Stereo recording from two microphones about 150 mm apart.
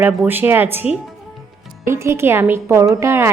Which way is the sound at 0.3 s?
15° right (ahead or behind).